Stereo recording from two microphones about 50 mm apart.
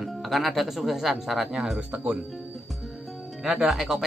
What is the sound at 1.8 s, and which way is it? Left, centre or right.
Speech, right.